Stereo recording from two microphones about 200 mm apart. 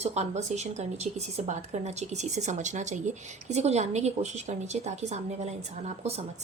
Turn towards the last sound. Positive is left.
turn(degrees=-30)  # may be behind; listen again after turning